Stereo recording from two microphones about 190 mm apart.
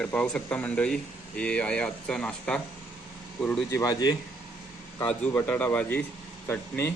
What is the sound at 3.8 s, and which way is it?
Speech, 20° left (ahead or behind).